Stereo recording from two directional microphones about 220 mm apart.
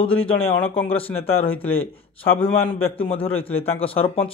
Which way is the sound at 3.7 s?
25° left (ahead or behind).